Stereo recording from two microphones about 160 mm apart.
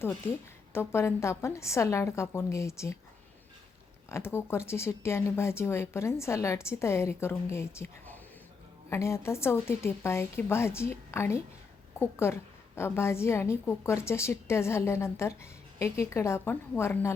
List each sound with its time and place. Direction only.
0.0 s speech: 15° left (ahead or behind)
4.1 s speech: 15° left (ahead or behind)